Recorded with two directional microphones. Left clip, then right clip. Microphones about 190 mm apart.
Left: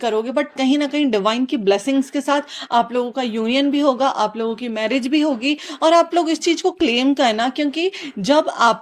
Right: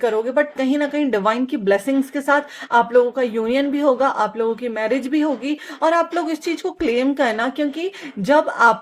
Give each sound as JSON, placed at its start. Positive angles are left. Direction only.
{"t": 0.0, "sound": "speech", "side_deg": 30}
{"t": 1.1, "sound": "speech", "side_deg": 20}
{"t": 6.0, "sound": "speech", "side_deg": 45}
{"t": 6.6, "sound": "speech", "side_deg": 25}